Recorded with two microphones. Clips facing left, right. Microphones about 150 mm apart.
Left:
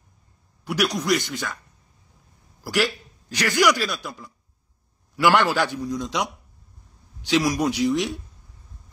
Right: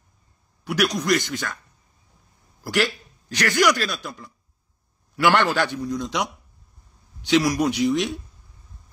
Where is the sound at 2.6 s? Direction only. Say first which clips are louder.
Even; 5° left (ahead or behind).